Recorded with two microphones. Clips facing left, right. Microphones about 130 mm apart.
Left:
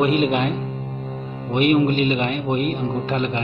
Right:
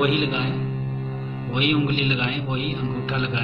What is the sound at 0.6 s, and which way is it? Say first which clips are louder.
Music: even; 30° left (ahead or behind).